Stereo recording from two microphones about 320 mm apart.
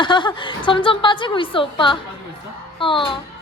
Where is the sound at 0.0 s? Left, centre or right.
Centre.